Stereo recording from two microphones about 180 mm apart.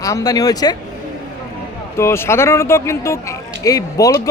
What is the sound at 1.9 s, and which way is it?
Speech, 15° left (ahead or behind).